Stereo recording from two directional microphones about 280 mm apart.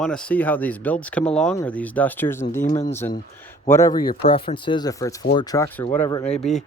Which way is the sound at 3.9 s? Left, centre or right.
Left.